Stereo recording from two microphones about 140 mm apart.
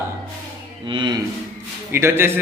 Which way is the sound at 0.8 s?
35° right (ahead or behind).